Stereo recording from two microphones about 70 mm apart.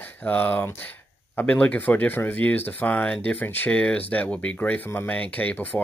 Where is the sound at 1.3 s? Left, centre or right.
Centre.